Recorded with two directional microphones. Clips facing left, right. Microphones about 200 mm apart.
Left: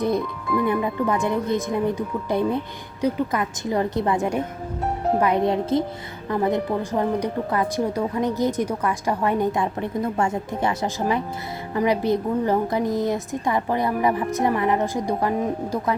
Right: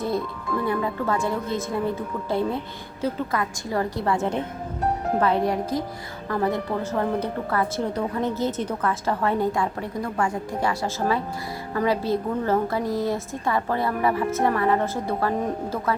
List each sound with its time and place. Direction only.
0.0 s a woman's voice: 15° left (ahead or behind)